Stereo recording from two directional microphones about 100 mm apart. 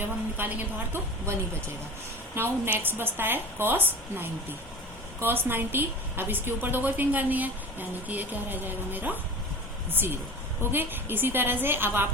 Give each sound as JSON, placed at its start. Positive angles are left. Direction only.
{"t": 0.0, "sound": "a woman's voice", "side_deg": -20}
{"t": 10.6, "sound": "a woman's voice", "side_deg": -20}